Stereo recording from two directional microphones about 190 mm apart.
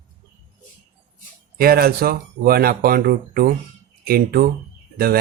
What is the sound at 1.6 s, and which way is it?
Speech, 50° right (ahead or behind).